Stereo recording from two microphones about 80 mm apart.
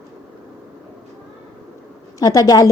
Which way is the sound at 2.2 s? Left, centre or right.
Left.